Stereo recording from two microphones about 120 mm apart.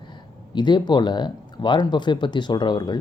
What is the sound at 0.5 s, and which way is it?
Speech, 40° left (ahead or behind).